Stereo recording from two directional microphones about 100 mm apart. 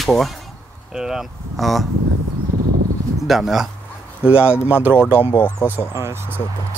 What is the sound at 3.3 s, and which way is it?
Speech, 5° right (ahead or behind).